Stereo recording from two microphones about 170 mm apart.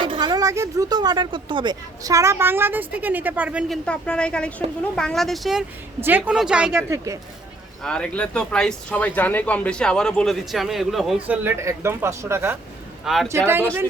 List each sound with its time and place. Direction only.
0.0 s speech: 25° right (ahead or behind); by 3.8 s 10° right (ahead or behind)
3.8 s speech: 5° left (ahead or behind)
6.9 s speech: 20° right (ahead or behind)
7.9 s speech: 5° left (ahead or behind)
11.4 s speech: 15° right (ahead or behind)
13.1 s speech: 5° right (ahead or behind)